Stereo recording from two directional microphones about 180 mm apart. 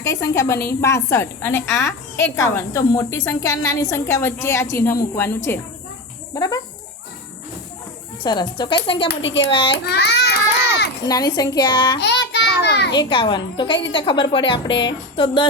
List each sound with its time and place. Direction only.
0.0 s a woman's voice: 15° left (ahead or behind)
6.3 s a woman's voice: 20° left (ahead or behind)
8.2 s a woman's voice: 25° left (ahead or behind)
9.0 s a child's voice: 90° left
9.5 s a woman's voice: 30° left (ahead or behind)
9.7 s a child's voice: 65° left (ahead or behind)
11.0 s a woman's voice: 20° left (ahead or behind)
11.9 s child singing: 70° left (ahead or behind)
12.6 s a sound: 70° left (ahead or behind)
12.9 s a woman's voice: 25° left (ahead or behind)